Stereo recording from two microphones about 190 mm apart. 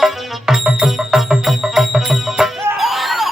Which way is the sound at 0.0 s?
Centre (ahead or behind).